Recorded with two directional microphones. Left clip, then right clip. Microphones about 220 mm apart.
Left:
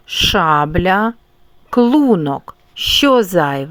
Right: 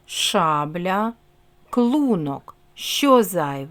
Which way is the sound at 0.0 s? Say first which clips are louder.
Left 6 dB; 20° left (ahead or behind).